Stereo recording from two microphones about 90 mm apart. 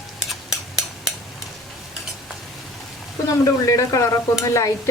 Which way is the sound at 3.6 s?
35° left (ahead or behind).